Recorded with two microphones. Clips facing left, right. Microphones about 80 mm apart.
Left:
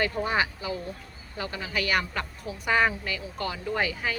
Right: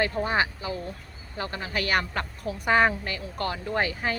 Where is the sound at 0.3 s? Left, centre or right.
Right.